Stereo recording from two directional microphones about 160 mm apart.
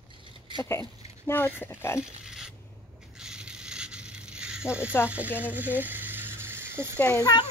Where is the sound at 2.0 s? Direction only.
5° right (ahead or behind).